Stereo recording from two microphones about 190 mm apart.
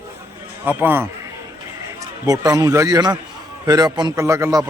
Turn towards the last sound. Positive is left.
turn(degrees=-15)  # may be behind; listen again after turning